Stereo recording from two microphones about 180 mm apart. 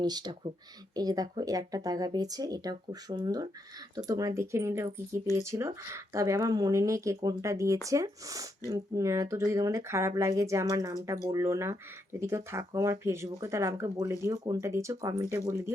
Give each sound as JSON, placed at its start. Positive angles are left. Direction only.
{"t": 0.0, "sound": "speech", "side_deg": -25}